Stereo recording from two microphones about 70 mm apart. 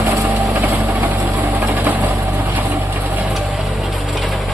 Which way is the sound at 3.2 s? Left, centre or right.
Centre.